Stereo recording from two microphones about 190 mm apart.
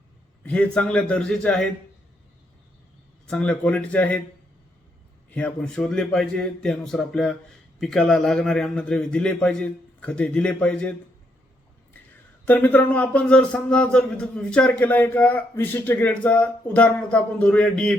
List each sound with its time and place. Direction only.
0.4 s a man's voice: 5° left (ahead or behind)
3.2 s speech: 5° left (ahead or behind)
5.3 s a man's voice: 5° left (ahead or behind)
12.5 s speech: 10° left (ahead or behind)